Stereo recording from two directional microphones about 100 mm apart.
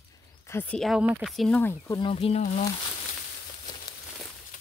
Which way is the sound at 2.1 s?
90° left.